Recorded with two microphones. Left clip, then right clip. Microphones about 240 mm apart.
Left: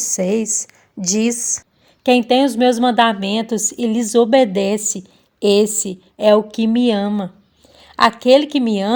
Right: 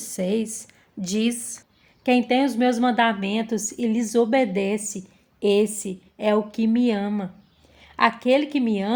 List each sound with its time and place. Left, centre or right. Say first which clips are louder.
0.0 s speech: left 7 dB; left
2.0 s a woman's voice: left 7 dB; left